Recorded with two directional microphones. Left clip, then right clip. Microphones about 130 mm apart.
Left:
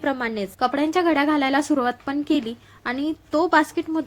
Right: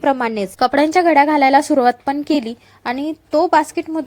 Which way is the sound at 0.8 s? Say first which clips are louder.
Right 8 dB; 45° right (ahead or behind).